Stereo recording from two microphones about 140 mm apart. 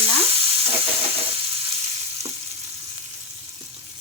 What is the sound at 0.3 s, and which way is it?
Sizzle, 45° right (ahead or behind).